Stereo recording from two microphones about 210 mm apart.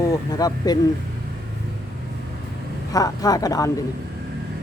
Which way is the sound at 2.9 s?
15° left (ahead or behind).